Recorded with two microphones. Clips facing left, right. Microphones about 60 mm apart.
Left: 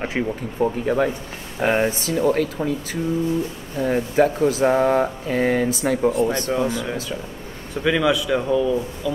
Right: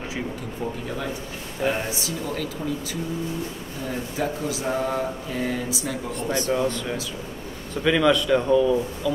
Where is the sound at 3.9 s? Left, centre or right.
Left.